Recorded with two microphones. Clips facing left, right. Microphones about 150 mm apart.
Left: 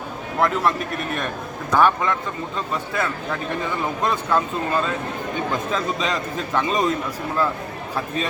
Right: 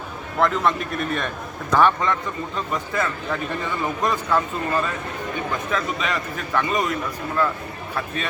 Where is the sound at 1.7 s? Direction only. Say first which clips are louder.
Even; 5° left (ahead or behind).